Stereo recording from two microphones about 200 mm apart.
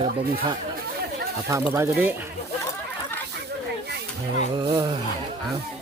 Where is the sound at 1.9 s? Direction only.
10° right (ahead or behind).